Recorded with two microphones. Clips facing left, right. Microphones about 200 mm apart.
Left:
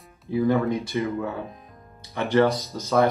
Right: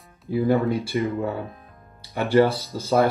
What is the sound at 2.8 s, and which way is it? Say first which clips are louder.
Speech: right 1 dB; 30° right (ahead or behind).